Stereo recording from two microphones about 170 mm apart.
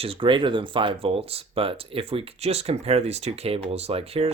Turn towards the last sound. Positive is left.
turn(degrees=-35)  # may be behind; listen again after turning